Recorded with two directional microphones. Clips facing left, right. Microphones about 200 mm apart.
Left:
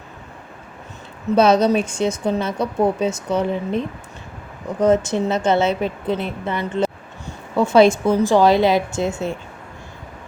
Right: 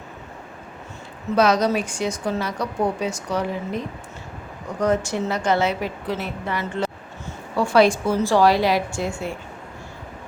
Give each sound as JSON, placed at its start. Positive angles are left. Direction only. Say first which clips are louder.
{"t": 1.4, "sound": "speech", "louder": "left 4 dB", "side_deg": 25}
{"t": 4.8, "sound": "speech", "louder": "left 5 dB", "side_deg": 20}